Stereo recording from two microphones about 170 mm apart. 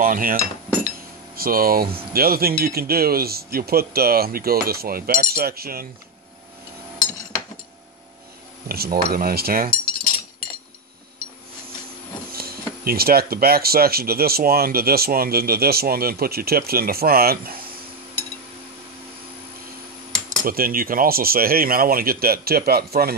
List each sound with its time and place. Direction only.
0.0 s speech: 55° right (ahead or behind)
8.6 s speech: 65° right (ahead or behind)
12.3 s speech: 65° right (ahead or behind)
20.4 s speech: 60° right (ahead or behind)